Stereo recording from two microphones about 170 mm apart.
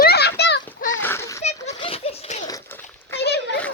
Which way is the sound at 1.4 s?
40° left (ahead or behind).